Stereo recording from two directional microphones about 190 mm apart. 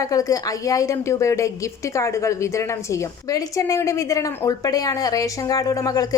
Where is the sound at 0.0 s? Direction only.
20° left (ahead or behind).